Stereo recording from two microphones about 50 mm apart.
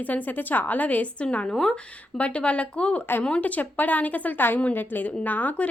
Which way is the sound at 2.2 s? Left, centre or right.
Left.